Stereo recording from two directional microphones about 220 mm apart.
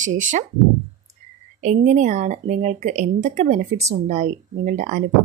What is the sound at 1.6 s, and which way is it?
Speech, 30° right (ahead or behind).